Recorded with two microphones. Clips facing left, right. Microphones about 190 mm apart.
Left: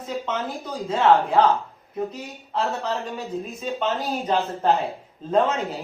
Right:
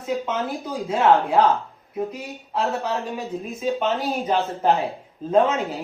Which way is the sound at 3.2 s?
Centre (ahead or behind).